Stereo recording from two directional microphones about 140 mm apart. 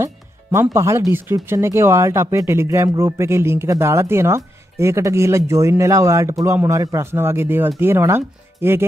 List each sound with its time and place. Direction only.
0.0 s speech: 20° right (ahead or behind)